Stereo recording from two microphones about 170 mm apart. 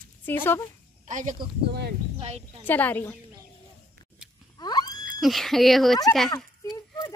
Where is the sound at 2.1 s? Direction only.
35° right (ahead or behind).